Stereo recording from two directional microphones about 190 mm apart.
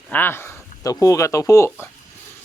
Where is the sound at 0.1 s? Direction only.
10° left (ahead or behind).